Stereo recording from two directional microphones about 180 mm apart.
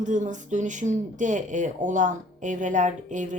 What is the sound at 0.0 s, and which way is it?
Speech, 45° right (ahead or behind).